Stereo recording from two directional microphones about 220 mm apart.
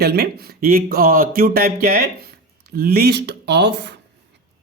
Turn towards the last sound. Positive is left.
turn(degrees=-50)  # may be behind; listen again after turning